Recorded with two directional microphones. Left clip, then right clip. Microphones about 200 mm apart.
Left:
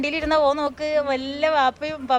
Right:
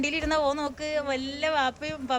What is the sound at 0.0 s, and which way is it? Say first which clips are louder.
Speech: left 6 dB; 10° right (ahead or behind).